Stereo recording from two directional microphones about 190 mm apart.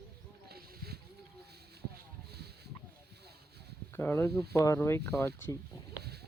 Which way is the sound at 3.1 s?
60° right (ahead or behind).